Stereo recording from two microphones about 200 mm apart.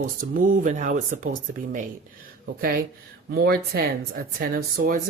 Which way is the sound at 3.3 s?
50° right (ahead or behind).